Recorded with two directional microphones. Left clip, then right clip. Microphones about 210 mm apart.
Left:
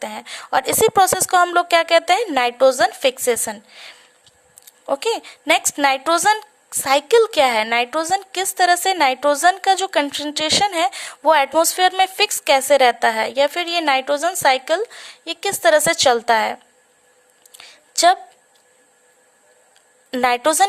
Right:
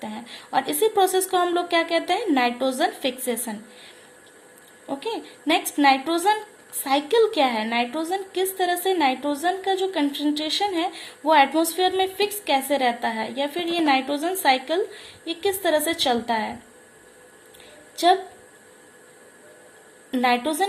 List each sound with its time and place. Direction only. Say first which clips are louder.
0.0 s a woman's voice: left 7 dB; 50° left (ahead or behind)
4.9 s a woman's voice: left 9 dB; 55° left (ahead or behind)
17.9 s a woman's voice: left 4 dB; 55° left (ahead or behind)
20.1 s a woman's voice: left 5 dB; 50° left (ahead or behind)